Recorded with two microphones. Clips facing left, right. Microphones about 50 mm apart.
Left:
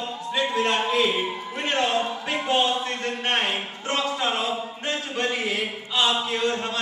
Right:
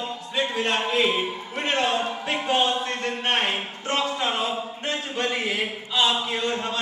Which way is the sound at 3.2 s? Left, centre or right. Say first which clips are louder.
Even; right.